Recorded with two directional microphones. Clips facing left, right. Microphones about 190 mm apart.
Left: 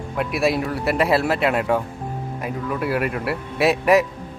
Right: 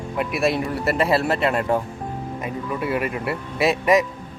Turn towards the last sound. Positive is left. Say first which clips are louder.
# left 1 dB
turn(degrees=0)  # may be behind; listen again after turning